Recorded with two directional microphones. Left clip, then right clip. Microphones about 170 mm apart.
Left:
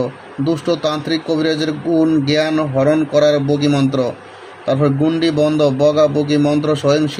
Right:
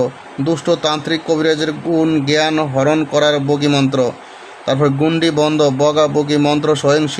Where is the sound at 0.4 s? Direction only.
20° right (ahead or behind).